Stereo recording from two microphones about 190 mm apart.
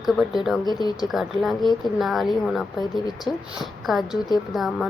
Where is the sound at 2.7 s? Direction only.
20° left (ahead or behind).